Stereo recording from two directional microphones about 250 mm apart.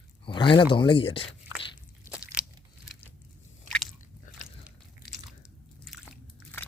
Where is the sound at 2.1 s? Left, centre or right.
Centre.